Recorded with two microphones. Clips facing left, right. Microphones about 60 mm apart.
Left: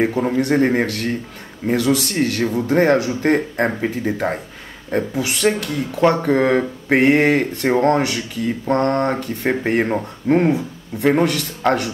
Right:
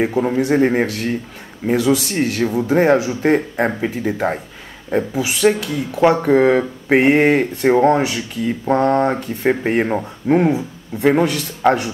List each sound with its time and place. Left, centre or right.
0.0 s a man's voice: centre